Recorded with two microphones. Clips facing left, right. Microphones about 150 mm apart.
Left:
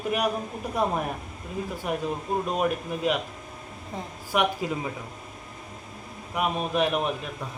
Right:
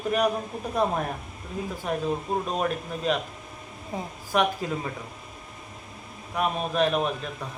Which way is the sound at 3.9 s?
10° right (ahead or behind).